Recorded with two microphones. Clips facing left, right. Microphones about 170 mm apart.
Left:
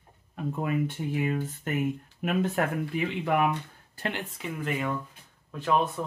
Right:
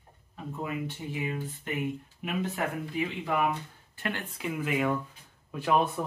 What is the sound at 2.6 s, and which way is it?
Speech, 60° left (ahead or behind).